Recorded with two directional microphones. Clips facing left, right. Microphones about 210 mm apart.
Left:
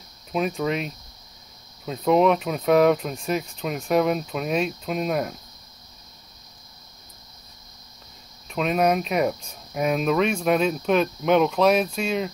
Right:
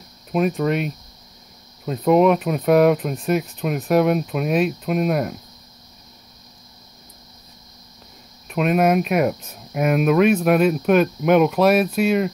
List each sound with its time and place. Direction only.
0.3 s speech: 5° right (ahead or behind)
8.5 s speech: 5° right (ahead or behind)